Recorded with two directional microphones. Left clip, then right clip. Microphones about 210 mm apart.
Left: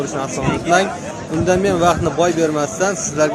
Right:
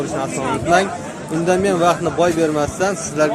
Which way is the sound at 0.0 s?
Centre (ahead or behind).